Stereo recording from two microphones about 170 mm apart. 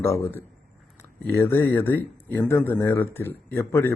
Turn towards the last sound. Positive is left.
turn(degrees=15)  # may be behind; listen again after turning